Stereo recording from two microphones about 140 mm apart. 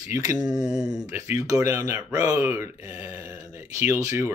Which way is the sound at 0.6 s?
5° right (ahead or behind).